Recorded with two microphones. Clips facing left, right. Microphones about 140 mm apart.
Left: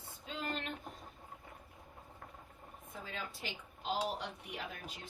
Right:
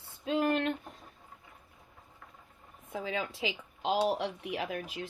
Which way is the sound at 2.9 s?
90° right.